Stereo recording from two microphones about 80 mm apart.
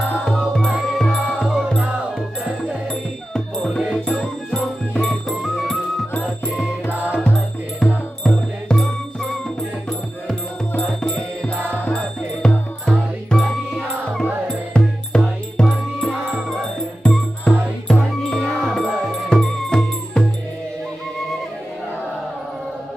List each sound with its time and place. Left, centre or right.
0.4 s music: centre
6.9 s music: left
8.2 s music: centre
17.0 s music: centre